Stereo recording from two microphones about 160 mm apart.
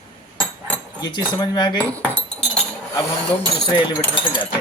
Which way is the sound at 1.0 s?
25° left (ahead or behind).